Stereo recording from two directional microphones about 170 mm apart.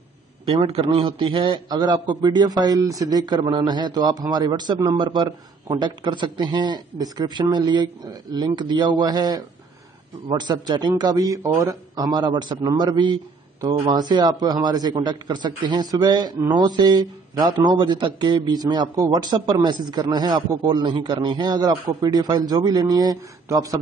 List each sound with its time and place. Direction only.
0.5 s a man's voice: 30° right (ahead or behind)